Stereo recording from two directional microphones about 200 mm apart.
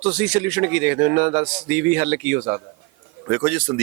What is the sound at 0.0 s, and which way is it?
Speech, 5° right (ahead or behind).